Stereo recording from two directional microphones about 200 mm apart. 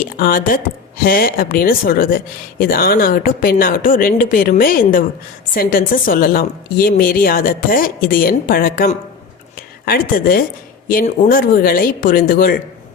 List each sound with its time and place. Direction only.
0.0 s speech: 45° left (ahead or behind)